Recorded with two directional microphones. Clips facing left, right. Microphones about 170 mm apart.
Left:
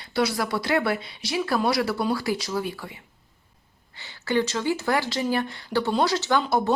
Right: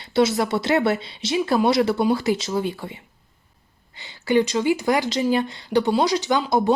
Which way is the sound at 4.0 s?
15° right (ahead or behind).